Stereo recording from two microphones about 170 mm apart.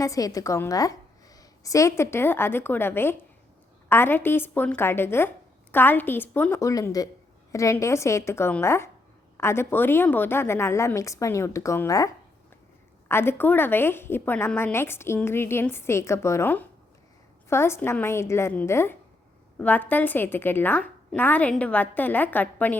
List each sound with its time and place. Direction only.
0.0 s a woman's voice: 20° left (ahead or behind)